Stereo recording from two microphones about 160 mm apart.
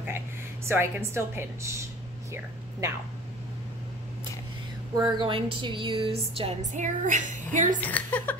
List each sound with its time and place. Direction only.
0.7 s a woman's voice: 15° right (ahead or behind)
4.9 s speech: 25° right (ahead or behind)
6.6 s speech: 50° right (ahead or behind)
7.8 s a woman's voice: 10° left (ahead or behind)